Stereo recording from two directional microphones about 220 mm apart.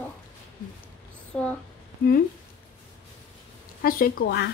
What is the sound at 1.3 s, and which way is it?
Speech, 5° left (ahead or behind).